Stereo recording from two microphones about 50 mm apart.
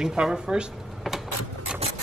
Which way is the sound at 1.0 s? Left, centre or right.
Centre.